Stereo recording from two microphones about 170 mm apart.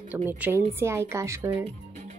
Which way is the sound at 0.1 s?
10° right (ahead or behind).